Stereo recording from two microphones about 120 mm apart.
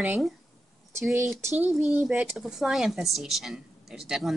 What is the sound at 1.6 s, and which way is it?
A woman's voice, centre (ahead or behind).